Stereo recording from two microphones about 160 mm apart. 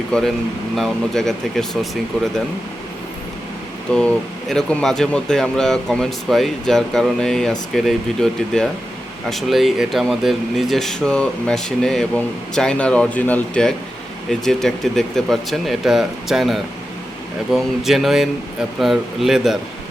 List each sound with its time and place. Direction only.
0.1 s speech: centre (ahead or behind)
3.9 s speech: 5° left (ahead or behind)